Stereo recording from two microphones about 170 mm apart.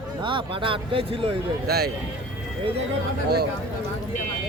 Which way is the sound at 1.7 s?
70° right (ahead or behind).